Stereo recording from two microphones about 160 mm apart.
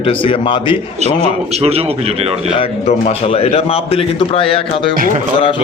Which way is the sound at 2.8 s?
40° left (ahead or behind).